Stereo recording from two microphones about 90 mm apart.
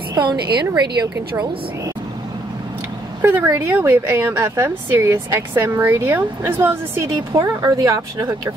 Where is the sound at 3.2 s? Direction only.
25° right (ahead or behind).